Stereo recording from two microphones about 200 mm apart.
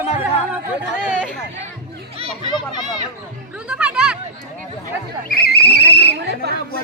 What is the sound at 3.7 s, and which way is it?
Chatter, 5° right (ahead or behind).